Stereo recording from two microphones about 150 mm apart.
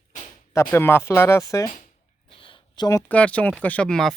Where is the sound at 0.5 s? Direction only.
15° left (ahead or behind).